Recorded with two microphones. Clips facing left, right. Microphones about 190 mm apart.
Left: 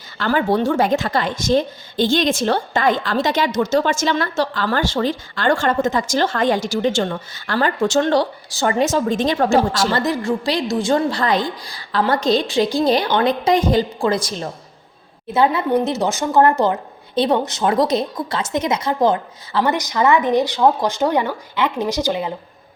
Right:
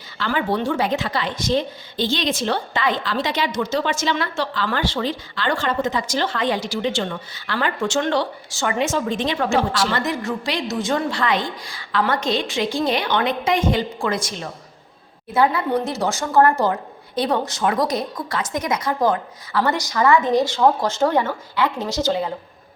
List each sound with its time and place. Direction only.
0.2 s a woman's voice: 40° left (ahead or behind)
15.3 s a woman's voice: 25° left (ahead or behind)